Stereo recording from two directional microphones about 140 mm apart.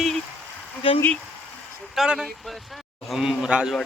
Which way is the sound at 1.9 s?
5° right (ahead or behind).